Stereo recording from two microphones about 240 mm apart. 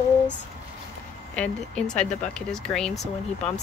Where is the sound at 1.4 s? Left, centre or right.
Centre.